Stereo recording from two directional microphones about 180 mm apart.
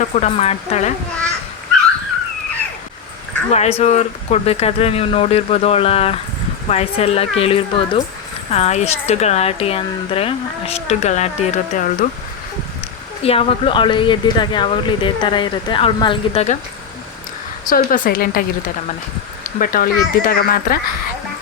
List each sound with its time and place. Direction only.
0.0 s speech: 35° left (ahead or behind)
3.5 s speech: 35° left (ahead or behind)
13.2 s speech: 30° left (ahead or behind)
17.7 s speech: 50° left (ahead or behind)
19.5 s speech: 50° left (ahead or behind)